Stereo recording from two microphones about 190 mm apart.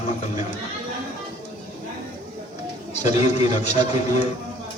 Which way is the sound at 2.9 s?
35° left (ahead or behind).